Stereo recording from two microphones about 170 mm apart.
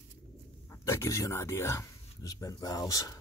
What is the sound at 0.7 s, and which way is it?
Speech, 15° left (ahead or behind).